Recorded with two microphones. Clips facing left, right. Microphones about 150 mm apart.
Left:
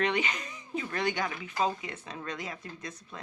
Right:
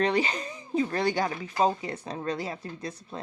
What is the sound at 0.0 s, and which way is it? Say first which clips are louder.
Speech: right 4 dB; 35° right (ahead or behind).